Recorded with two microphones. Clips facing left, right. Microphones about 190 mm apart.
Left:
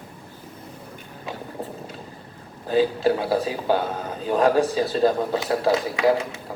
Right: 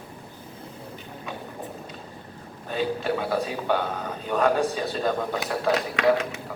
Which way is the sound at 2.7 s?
30° left (ahead or behind).